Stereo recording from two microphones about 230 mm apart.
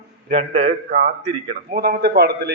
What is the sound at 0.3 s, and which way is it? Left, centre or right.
A man's voice, right.